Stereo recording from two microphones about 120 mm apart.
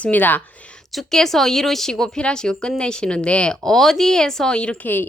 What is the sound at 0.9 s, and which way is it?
A woman's voice, 5° left (ahead or behind).